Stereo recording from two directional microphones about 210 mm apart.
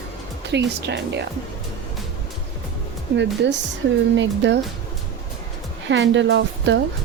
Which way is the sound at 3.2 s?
55° right (ahead or behind).